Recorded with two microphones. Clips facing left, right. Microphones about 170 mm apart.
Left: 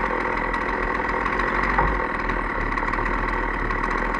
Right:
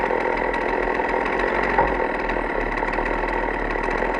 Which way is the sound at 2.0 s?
60° right (ahead or behind).